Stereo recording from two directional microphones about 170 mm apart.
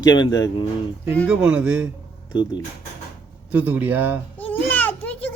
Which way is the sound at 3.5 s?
10° right (ahead or behind).